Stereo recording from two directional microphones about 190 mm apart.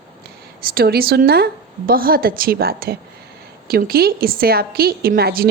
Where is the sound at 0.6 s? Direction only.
50° right (ahead or behind).